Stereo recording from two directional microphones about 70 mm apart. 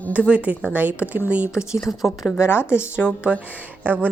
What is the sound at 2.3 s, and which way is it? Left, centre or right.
Speech, left.